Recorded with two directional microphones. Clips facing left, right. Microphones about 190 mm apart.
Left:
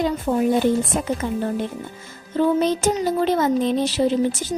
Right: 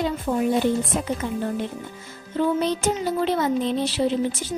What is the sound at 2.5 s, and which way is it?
A child's voice, 45° left (ahead or behind).